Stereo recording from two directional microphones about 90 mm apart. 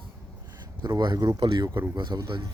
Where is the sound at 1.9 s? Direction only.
50° right (ahead or behind).